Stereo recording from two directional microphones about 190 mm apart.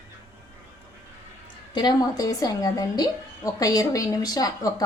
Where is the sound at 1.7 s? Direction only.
20° left (ahead or behind).